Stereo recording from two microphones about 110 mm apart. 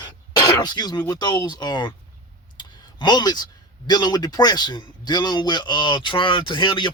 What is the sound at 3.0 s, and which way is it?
Speech, 40° left (ahead or behind).